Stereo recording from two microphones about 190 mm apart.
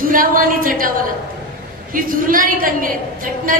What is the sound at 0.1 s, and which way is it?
Speech, 45° right (ahead or behind).